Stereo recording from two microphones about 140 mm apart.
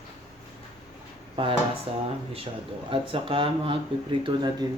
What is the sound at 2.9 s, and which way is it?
Speech, 40° right (ahead or behind).